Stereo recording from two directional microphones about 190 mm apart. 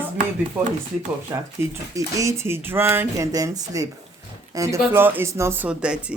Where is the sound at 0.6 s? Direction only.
10° right (ahead or behind).